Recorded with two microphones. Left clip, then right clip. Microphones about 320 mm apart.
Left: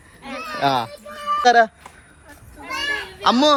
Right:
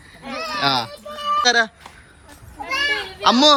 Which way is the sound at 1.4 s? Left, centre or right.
Centre.